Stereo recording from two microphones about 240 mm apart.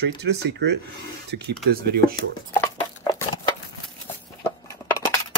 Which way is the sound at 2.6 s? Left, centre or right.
Centre.